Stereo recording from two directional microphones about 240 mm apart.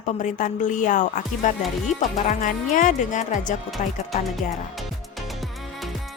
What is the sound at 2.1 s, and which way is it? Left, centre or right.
A woman's voice, left.